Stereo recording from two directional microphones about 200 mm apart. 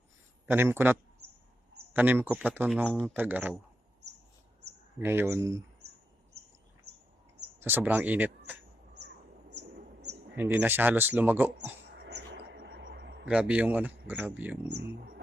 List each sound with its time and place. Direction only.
0.4 s speech: 10° right (ahead or behind)
2.0 s speech: 10° right (ahead or behind)
2.8 s speech: 5° left (ahead or behind)
3.1 s speech: 10° right (ahead or behind)
4.9 s speech: 10° right (ahead or behind)
7.6 s speech: 10° right (ahead or behind)
9.5 s a sound: 55° right (ahead or behind)
10.3 s speech: 10° right (ahead or behind)
11.5 s a sound: 55° right (ahead or behind)
13.2 s speech: 5° right (ahead or behind)